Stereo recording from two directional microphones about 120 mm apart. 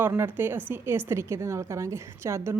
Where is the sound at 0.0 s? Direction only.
15° right (ahead or behind).